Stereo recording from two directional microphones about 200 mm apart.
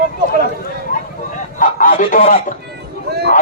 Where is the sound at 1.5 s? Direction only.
45° left (ahead or behind).